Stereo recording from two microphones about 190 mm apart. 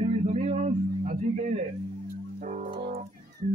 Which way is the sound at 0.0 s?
35° right (ahead or behind).